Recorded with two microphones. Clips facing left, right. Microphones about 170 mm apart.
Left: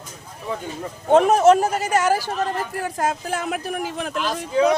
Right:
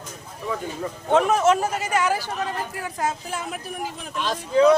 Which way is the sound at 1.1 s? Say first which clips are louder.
Left 5 dB; 40° left (ahead or behind).